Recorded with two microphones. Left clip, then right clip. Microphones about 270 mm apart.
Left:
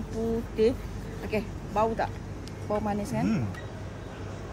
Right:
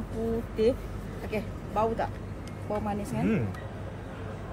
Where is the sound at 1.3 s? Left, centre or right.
Left.